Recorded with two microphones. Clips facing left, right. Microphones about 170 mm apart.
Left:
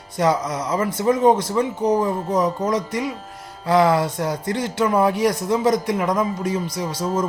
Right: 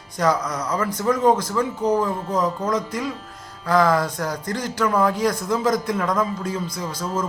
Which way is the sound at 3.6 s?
15° left (ahead or behind).